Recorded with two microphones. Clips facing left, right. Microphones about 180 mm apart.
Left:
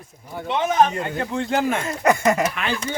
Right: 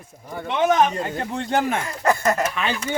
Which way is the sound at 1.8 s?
15° left (ahead or behind).